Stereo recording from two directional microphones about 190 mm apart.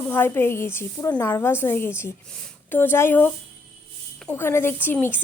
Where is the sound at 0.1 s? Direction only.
10° left (ahead or behind).